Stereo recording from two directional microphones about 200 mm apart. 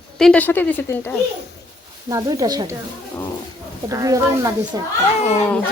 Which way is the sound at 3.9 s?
15° right (ahead or behind).